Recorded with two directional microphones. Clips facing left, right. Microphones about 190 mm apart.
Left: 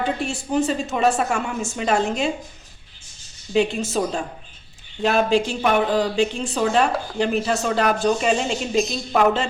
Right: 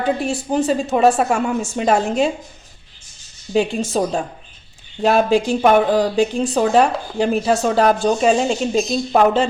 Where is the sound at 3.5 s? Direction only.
35° right (ahead or behind).